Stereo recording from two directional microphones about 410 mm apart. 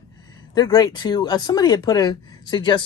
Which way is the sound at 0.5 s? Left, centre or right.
Centre.